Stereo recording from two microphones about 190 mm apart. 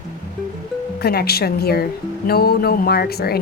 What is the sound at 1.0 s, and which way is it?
Speech, 55° left (ahead or behind).